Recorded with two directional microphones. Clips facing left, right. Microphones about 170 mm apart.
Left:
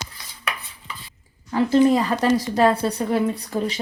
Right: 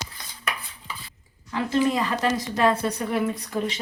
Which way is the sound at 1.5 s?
35° left (ahead or behind).